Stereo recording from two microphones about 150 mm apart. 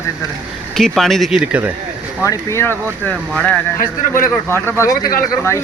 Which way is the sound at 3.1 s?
5° left (ahead or behind).